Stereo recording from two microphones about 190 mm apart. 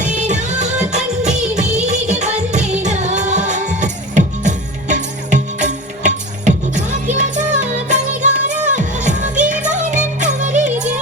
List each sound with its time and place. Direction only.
0.0 s music of bollywood: 40° right (ahead or behind)
1.5 s music: 35° right (ahead or behind)